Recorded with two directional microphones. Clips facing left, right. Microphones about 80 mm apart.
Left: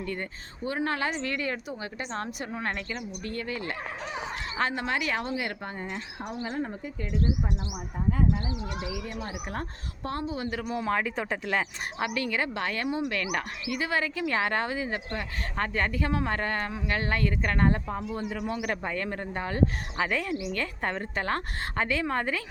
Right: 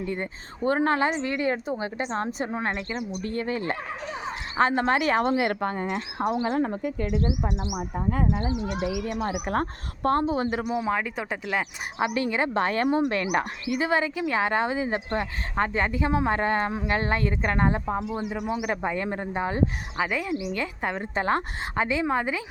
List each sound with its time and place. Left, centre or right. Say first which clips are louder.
0.0 s speech: right 4 dB; centre
0.6 s speech: right 7 dB; right
5.5 s speech: right 8 dB; right
7.6 s speech: right 3 dB; right
10.6 s speech: right 2 dB; centre
11.9 s speech: right 5 dB; right
13.7 s speech: right 5 dB; right
20.0 s a woman's voice: right 2 dB; centre